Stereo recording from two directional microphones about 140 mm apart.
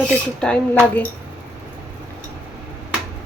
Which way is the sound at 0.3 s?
5° left (ahead or behind).